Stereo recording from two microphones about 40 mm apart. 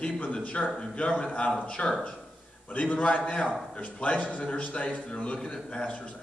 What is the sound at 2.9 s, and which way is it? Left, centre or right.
A man's voice, left.